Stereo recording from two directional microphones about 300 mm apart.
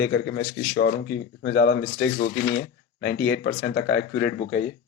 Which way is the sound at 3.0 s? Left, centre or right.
Left.